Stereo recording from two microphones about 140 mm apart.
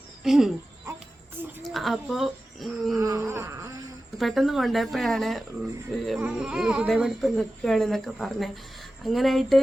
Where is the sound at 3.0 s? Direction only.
25° right (ahead or behind).